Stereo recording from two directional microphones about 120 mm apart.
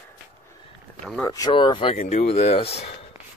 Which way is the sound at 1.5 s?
45° left (ahead or behind).